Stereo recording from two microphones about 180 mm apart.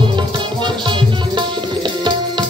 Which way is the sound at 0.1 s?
25° right (ahead or behind).